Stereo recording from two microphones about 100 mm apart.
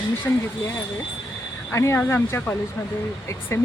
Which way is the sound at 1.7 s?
25° left (ahead or behind).